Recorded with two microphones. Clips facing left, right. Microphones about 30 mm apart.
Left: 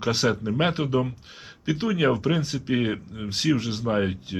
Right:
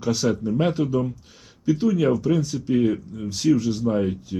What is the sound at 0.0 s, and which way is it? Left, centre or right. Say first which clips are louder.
Speech: right 1 dB; left.